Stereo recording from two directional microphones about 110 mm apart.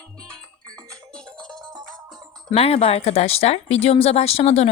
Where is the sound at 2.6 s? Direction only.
65° left (ahead or behind).